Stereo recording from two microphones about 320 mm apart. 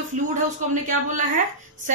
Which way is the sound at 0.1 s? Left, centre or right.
Right.